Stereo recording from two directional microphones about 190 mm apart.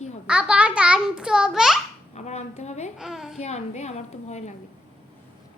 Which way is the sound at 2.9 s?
Centre (ahead or behind).